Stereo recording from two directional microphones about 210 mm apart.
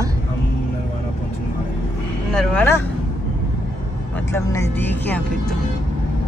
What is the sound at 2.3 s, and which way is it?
Speech, 10° left (ahead or behind).